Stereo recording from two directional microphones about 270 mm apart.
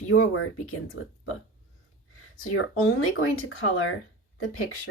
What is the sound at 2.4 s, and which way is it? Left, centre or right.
Speech, left.